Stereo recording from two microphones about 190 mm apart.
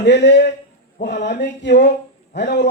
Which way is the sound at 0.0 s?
65° left (ahead or behind).